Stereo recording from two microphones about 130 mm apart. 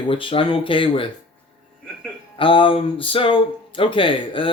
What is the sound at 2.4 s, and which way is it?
A man's voice, 40° left (ahead or behind).